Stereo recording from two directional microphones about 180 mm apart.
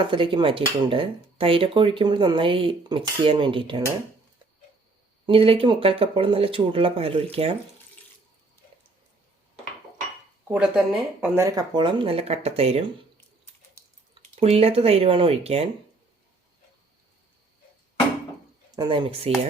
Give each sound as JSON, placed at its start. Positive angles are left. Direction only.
{"t": 0.0, "sound": "speech", "side_deg": -30}
{"t": 5.2, "sound": "speech", "side_deg": -30}
{"t": 10.5, "sound": "speech", "side_deg": -5}
{"t": 11.4, "sound": "speech", "side_deg": -20}
{"t": 14.3, "sound": "speech", "side_deg": -35}
{"t": 18.8, "sound": "speech", "side_deg": -30}